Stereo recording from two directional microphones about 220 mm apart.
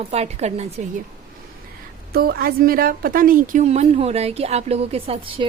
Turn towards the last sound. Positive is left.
turn(degrees=-25)  # may be behind; listen again after turning